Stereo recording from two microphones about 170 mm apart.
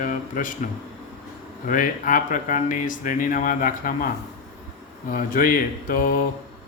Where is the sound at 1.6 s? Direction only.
50° left (ahead or behind).